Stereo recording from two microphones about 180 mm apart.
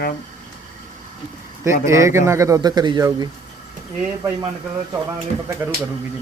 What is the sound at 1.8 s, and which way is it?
Speech, 15° right (ahead or behind).